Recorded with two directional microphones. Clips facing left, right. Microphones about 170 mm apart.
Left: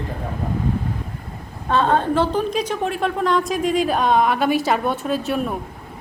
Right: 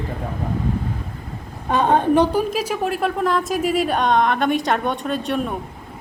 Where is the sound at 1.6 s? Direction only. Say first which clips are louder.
Right 1 dB; 15° right (ahead or behind); by 5.5 s centre (ahead or behind).